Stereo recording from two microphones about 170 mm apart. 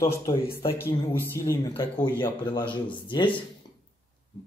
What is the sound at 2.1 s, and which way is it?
A man's voice, 30° left (ahead or behind).